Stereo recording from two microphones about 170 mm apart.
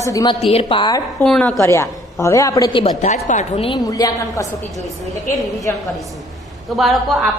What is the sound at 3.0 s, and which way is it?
Speech, 45° left (ahead or behind).